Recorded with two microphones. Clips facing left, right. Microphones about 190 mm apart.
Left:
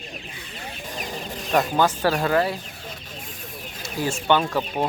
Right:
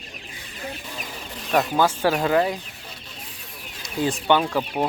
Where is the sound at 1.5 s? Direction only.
5° right (ahead or behind).